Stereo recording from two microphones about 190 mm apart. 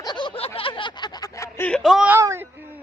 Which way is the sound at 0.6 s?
25° left (ahead or behind).